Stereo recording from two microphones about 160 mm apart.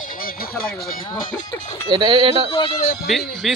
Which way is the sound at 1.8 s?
30° right (ahead or behind).